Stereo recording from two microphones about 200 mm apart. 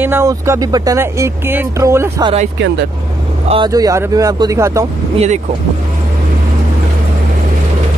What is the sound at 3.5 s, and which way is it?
Speech, 20° right (ahead or behind).